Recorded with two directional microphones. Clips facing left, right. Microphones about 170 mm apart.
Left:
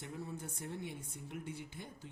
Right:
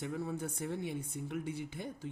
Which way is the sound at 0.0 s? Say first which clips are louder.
Right 7 dB; 90° right.